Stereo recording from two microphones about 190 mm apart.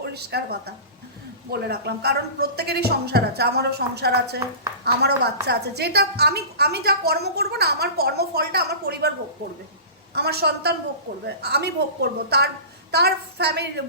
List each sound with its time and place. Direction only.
0.0 s a woman's voice: 55° right (ahead or behind)
10.2 s a woman's voice: 60° right (ahead or behind)